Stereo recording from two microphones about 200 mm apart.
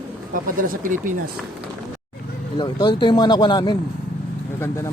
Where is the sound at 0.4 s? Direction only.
45° right (ahead or behind).